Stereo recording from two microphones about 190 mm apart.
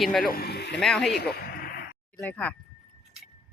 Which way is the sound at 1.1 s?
55° left (ahead or behind).